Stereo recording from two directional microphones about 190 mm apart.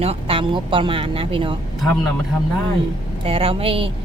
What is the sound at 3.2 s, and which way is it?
Speech, 30° right (ahead or behind).